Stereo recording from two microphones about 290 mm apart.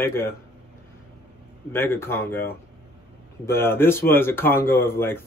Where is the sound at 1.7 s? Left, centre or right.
Centre.